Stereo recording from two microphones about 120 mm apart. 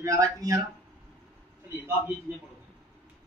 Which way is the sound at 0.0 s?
25° right (ahead or behind).